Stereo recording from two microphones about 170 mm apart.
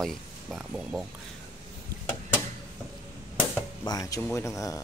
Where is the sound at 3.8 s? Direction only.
20° left (ahead or behind).